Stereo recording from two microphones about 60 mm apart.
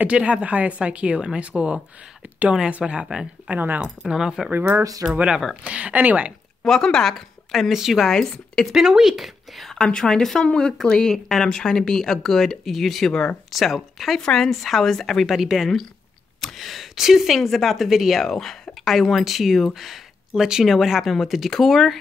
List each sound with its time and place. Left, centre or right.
0.0 s a woman's voice: centre
2.8 s speech: centre
3.4 s a woman's voice: right
3.8 s speech: centre
4.5 s speech: right
5.6 s a woman's voice: right
6.6 s speech: centre
8.1 s a woman's voice: centre
8.7 s a woman's voice: centre